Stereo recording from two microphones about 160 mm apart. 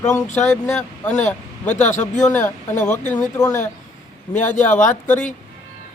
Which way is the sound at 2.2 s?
20° left (ahead or behind).